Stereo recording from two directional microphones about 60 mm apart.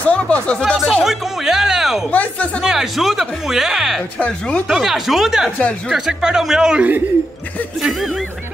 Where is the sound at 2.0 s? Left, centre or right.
Left.